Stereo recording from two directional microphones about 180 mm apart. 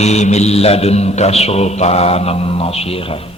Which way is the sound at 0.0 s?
40° left (ahead or behind).